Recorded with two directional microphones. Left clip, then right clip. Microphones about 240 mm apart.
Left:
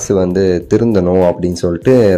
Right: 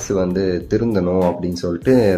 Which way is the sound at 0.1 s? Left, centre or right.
Left.